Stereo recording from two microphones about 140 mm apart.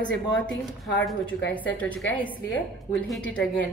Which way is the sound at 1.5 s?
10° left (ahead or behind).